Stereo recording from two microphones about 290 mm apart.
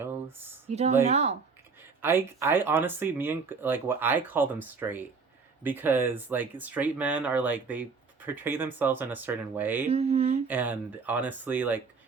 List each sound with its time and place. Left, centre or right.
0.7 s speech: right
2.0 s speech: centre
9.9 s speech: right
10.5 s speech: centre